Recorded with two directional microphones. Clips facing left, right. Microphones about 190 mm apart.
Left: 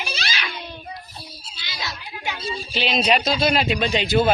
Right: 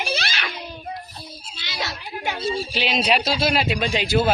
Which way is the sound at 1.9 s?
40° right (ahead or behind).